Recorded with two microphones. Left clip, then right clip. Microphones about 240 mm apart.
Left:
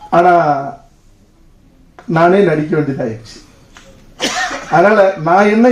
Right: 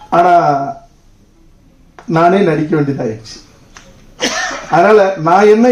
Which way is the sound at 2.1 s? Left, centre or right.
Right.